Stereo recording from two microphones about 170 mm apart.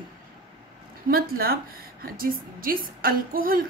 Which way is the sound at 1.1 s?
60° right (ahead or behind).